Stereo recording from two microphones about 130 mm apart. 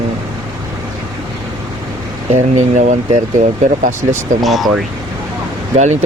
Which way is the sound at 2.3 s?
65° right (ahead or behind).